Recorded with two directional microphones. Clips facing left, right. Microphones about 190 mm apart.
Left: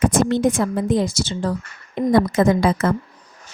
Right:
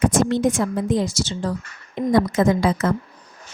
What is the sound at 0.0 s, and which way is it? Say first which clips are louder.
A woman's voice: left 1 dB; 60° left (ahead or behind).